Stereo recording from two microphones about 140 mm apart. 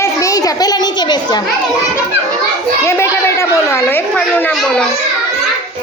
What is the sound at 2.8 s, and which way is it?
A child's voice, 20° left (ahead or behind).